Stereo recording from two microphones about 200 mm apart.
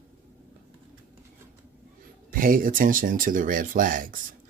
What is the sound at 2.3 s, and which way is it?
Speech, 45° right (ahead or behind).